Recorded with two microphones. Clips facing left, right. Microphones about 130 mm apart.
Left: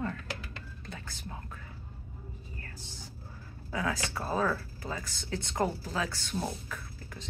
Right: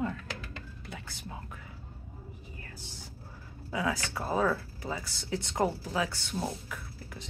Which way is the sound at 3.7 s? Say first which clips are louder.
Right 1 dB; 15° right (ahead or behind).